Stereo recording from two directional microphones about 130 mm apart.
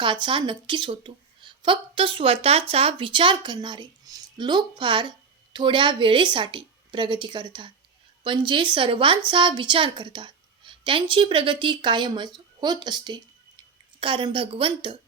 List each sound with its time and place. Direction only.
0.0 s a woman's voice: 40° right (ahead or behind)